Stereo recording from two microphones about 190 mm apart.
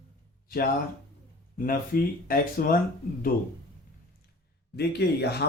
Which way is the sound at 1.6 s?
50° left (ahead or behind).